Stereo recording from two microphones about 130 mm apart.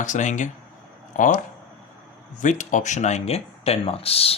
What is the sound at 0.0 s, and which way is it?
Speech, 70° left (ahead or behind).